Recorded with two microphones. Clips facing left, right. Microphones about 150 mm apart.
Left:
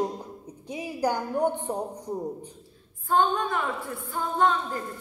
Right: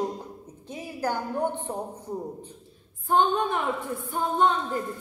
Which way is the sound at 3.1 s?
20° right (ahead or behind).